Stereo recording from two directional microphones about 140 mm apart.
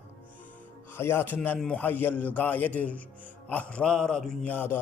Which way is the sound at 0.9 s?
15° left (ahead or behind).